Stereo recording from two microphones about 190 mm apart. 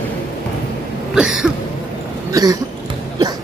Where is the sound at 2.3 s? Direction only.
20° right (ahead or behind).